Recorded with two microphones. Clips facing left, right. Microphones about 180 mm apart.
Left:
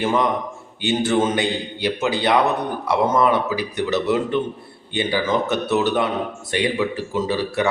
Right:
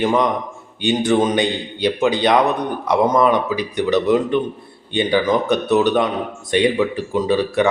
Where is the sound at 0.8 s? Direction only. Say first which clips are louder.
Right 3 dB; 15° right (ahead or behind).